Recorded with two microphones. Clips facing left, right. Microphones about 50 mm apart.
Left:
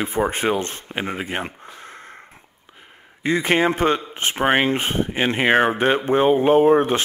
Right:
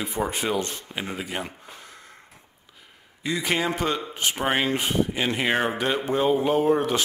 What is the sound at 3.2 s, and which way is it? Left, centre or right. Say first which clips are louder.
Speech: left 7 dB; left.